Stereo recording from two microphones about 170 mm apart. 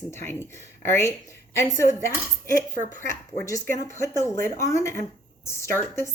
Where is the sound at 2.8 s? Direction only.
50° right (ahead or behind).